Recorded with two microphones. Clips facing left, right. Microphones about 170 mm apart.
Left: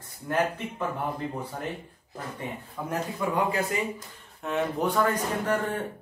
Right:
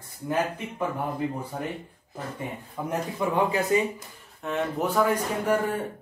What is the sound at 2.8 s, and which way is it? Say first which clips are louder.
Speech: right 2 dB; 15° right (ahead or behind).